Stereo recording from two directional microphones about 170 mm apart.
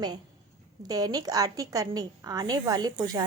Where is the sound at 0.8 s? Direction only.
20° right (ahead or behind).